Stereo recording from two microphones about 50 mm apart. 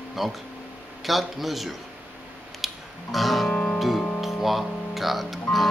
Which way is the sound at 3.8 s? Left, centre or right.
Centre.